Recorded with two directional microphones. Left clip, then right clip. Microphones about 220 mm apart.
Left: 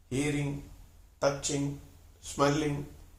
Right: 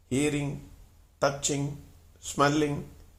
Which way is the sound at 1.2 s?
40° right (ahead or behind).